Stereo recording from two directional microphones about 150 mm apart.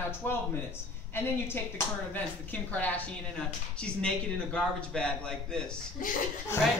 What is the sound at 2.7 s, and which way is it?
A woman's voice, 10° left (ahead or behind).